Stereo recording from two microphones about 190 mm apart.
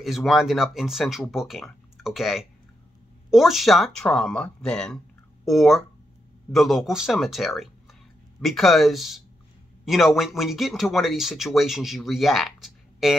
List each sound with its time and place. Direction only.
0.0 s speech: centre (ahead or behind)